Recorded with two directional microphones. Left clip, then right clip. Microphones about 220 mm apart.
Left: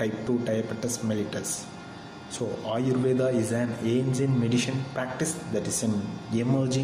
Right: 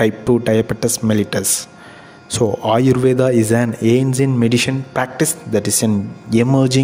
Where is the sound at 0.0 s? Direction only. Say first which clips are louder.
Right 13 dB; 50° right (ahead or behind).